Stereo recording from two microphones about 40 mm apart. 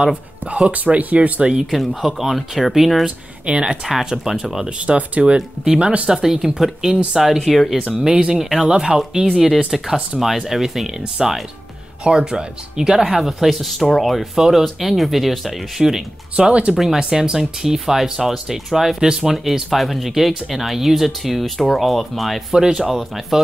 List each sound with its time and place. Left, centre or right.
0.7 s speech: right
2.0 s speech: centre
3.4 s speech: right
4.6 s speech: right
6.0 s speech: centre
8.1 s speech: right
8.4 s speech: centre
8.6 s speech: centre
12.0 s speech: right
13.0 s speech: centre
15.8 s speech: centre
22.6 s speech: centre